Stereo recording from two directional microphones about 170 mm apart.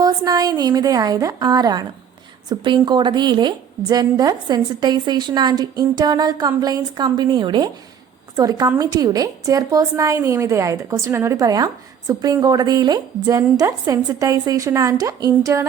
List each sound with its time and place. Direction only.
0.0 s a woman's voice: 20° right (ahead or behind)